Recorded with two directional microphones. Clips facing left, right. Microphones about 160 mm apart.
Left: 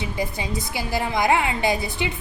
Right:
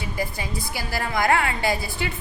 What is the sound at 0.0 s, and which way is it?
A woman's voice, 20° left (ahead or behind).